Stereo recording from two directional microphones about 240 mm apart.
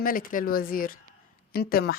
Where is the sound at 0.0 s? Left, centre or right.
Left.